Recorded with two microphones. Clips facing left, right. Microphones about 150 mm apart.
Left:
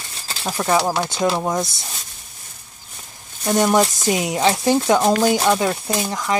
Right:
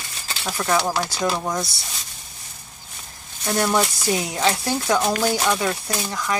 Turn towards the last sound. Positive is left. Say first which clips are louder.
# left 4 dB
turn(degrees=20)  # may be behind; listen again after turning